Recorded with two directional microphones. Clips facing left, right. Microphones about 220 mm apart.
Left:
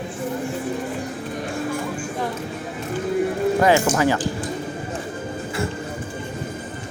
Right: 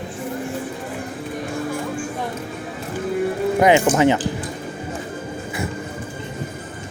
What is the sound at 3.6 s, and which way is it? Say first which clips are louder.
Speech: right 4 dB; 20° right (ahead or behind).